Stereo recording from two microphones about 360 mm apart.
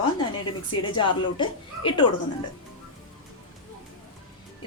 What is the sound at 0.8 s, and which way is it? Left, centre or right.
Speech, centre.